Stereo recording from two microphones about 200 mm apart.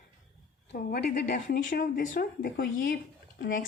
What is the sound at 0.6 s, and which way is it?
Speech, 50° left (ahead or behind).